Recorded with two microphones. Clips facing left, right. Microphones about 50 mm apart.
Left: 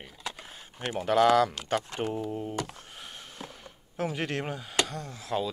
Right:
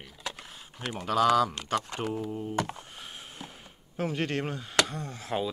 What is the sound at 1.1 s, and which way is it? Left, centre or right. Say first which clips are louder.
Speech: left 2 dB; left.